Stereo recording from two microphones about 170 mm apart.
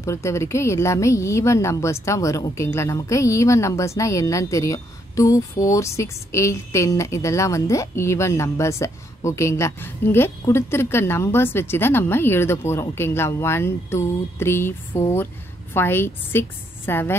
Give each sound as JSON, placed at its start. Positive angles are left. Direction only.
{"t": 0.0, "sound": "speech", "side_deg": 15}